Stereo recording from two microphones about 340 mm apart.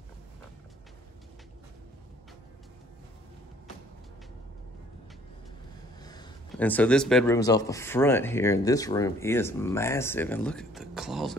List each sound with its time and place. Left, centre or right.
6.5 s speech: centre